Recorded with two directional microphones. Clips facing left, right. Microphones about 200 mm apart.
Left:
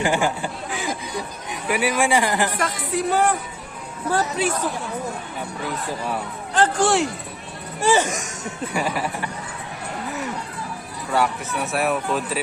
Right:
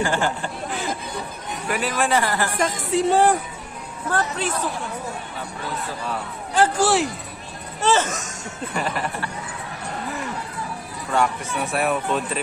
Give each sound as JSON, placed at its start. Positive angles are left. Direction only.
{"t": 0.0, "sound": "speech", "side_deg": 10}
{"t": 2.6, "sound": "speech", "side_deg": -25}
{"t": 4.1, "sound": "speech", "side_deg": 10}
{"t": 6.5, "sound": "speech", "side_deg": -10}
{"t": 7.8, "sound": "speech", "side_deg": 15}
{"t": 11.1, "sound": "speech", "side_deg": 5}